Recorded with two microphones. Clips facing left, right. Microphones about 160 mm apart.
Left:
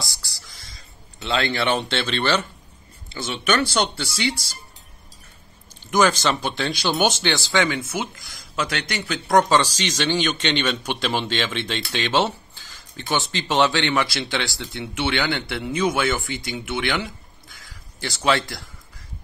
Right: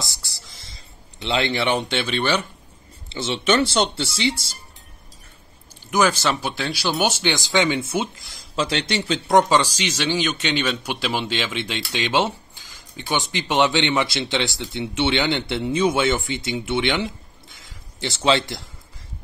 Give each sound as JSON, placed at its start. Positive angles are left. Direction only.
{"t": 0.0, "sound": "speech", "side_deg": -25}
{"t": 3.1, "sound": "speech", "side_deg": -25}
{"t": 5.9, "sound": "speech", "side_deg": -10}